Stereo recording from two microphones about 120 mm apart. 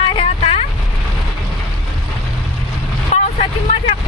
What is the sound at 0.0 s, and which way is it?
Vehicle, 45° left (ahead or behind).